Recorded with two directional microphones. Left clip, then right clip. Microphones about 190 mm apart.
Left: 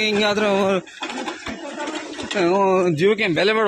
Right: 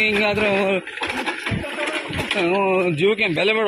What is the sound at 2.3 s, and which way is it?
Speech, 20° left (ahead or behind).